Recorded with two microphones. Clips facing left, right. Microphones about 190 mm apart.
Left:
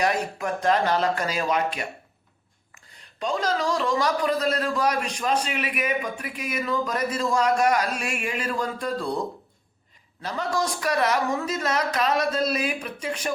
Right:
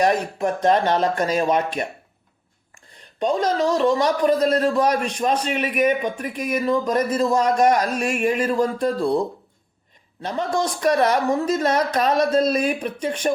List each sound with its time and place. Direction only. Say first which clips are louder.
0.0 s speech: right 5 dB; 35° right (ahead or behind)
2.7 s a sound: right 8 dB; 30° right (ahead or behind)
3.9 s speech: right 5 dB; 30° right (ahead or behind)
10.2 s speech: right 4 dB; 25° right (ahead or behind)